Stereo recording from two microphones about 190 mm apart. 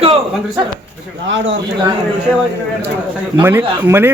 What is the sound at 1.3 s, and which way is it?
Speech, 75° right (ahead or behind).